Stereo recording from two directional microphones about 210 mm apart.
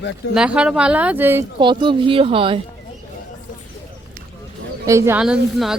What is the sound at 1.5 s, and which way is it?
Speech, 20° right (ahead or behind).